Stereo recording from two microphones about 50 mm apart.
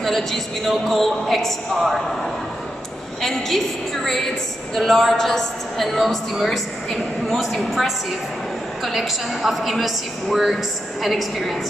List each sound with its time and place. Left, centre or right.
0.0 s a man's voice: centre
3.2 s a woman's voice: centre